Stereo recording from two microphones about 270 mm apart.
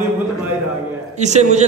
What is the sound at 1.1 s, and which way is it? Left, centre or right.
Speech, right.